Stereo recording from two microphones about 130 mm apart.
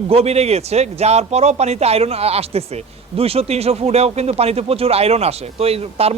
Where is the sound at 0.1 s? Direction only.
50° right (ahead or behind).